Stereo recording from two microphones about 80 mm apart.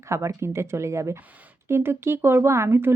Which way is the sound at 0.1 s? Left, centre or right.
Right.